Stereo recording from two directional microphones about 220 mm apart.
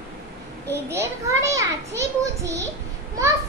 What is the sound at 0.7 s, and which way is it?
A child's voice, 10° right (ahead or behind).